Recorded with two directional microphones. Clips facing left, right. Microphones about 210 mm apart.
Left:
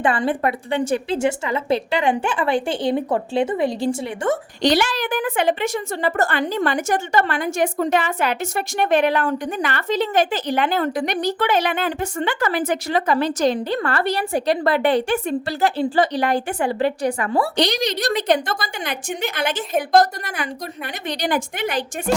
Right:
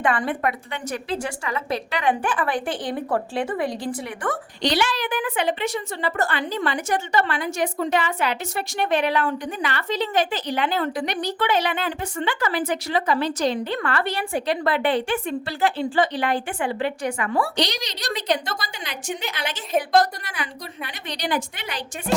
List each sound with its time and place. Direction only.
0.0 s a woman's voice: 30° left (ahead or behind)
4.6 s a woman's voice: 45° left (ahead or behind)